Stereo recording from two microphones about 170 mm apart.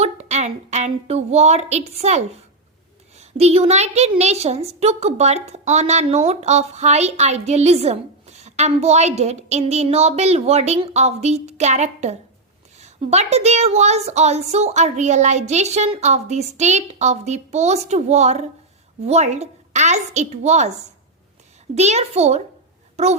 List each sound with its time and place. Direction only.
0.0 s a woman's voice: 40° right (ahead or behind)
21.8 s a woman's voice: 40° right (ahead or behind)